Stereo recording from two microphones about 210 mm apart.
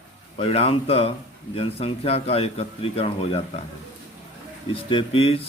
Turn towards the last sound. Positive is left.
turn(degrees=25)  # may be behind; listen again after turning